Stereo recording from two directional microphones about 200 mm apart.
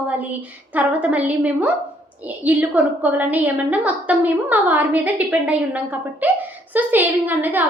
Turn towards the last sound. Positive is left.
turn(degrees=-10)  # may be behind; listen again after turning